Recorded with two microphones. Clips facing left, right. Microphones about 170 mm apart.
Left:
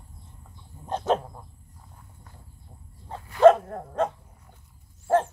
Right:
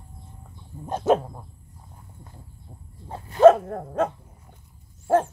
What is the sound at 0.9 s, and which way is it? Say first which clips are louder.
Dog: right 4 dB; 10° right (ahead or behind).